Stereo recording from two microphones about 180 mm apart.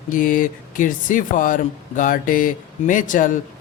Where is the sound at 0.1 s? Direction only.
50° left (ahead or behind).